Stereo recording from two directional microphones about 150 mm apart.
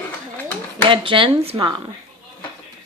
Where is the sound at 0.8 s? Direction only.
35° right (ahead or behind).